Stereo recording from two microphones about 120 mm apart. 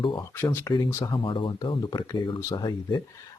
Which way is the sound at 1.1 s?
45° left (ahead or behind).